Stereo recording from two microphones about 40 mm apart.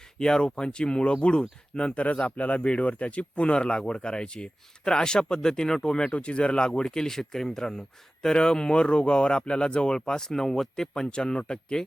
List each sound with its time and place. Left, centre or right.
0.2 s speech: centre
6.1 s speech: left